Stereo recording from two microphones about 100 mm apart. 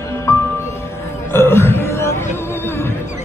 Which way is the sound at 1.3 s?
25° left (ahead or behind).